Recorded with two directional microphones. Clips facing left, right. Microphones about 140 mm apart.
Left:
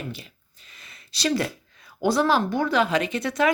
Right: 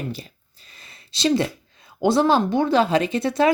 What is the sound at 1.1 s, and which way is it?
Speech, 25° right (ahead or behind).